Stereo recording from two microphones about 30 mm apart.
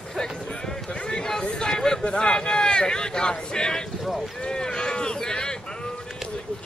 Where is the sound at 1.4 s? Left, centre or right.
Left.